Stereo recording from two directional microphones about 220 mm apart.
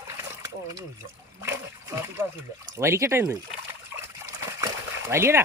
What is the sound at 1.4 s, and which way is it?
Speech, 10° right (ahead or behind).